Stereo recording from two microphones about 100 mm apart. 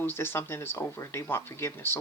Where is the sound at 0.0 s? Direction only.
20° left (ahead or behind).